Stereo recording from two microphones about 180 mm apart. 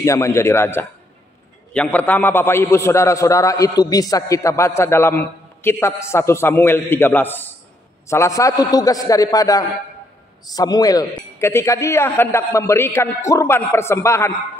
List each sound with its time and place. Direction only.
0.0 s a man's voice: 15° left (ahead or behind)